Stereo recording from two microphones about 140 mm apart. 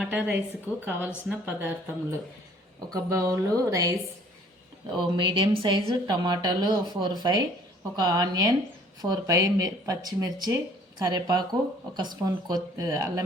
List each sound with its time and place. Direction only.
0.0 s speech: 5° right (ahead or behind)
2.9 s speech: 25° right (ahead or behind)
4.9 s a woman's voice: 35° right (ahead or behind)